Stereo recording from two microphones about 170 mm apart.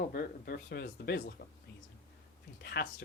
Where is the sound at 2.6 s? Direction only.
70° left (ahead or behind).